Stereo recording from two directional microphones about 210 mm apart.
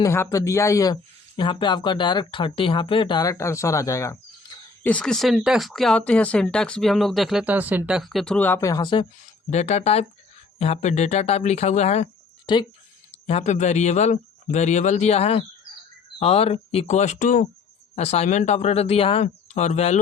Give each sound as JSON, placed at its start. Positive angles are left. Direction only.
{"t": 0.0, "sound": "speech", "side_deg": 15}
{"t": 12.5, "sound": "speech", "side_deg": 20}
{"t": 13.2, "sound": "speech", "side_deg": 30}